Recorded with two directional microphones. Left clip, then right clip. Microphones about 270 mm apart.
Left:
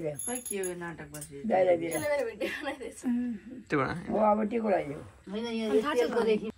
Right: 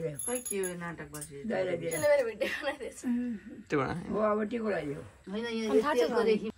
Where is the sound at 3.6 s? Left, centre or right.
Centre.